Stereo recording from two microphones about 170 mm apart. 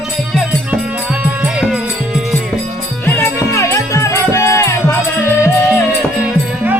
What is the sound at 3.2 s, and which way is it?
Music, 15° left (ahead or behind).